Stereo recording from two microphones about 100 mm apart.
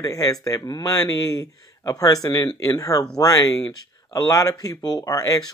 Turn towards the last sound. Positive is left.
turn(degrees=35)  # may be behind; listen again after turning